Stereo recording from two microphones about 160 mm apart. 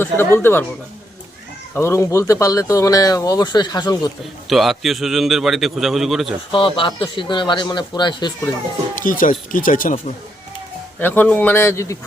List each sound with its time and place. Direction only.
0.0 s a man's voice: 15° left (ahead or behind)
1.7 s speech: 15° left (ahead or behind)
4.4 s a man's voice: centre (ahead or behind)
6.5 s speech: 30° left (ahead or behind)
9.0 s speech: 55° left (ahead or behind)
11.0 s a man's voice: 10° left (ahead or behind)